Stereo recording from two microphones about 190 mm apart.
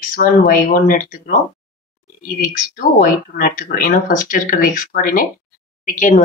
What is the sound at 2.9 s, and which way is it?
A woman's voice, 45° left (ahead or behind).